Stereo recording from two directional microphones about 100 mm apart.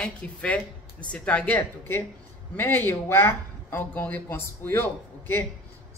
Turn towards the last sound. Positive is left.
turn(degrees=20)  # may be behind; listen again after turning